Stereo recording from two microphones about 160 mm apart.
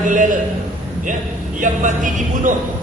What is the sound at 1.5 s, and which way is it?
Speech, 50° right (ahead or behind).